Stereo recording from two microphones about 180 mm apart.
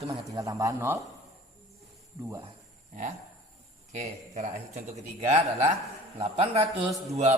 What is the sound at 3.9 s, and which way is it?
Speech, 40° right (ahead or behind).